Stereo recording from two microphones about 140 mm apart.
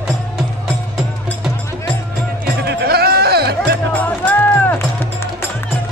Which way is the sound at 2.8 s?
90° right.